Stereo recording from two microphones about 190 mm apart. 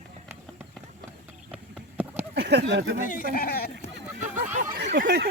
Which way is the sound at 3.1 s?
50° left (ahead or behind).